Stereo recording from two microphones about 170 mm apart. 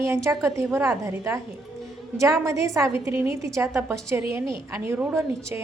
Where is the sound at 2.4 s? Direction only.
20° right (ahead or behind).